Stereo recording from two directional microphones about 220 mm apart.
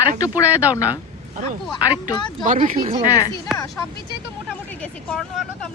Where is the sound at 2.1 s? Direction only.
20° left (ahead or behind).